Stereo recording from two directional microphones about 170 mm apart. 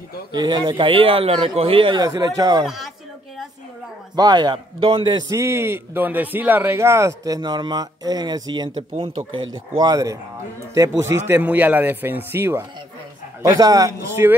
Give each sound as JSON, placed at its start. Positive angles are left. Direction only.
{"t": 0.3, "sound": "a man's voice", "side_deg": -25}
{"t": 2.6, "sound": "speech", "side_deg": 0}
{"t": 4.1, "sound": "a man's voice", "side_deg": -25}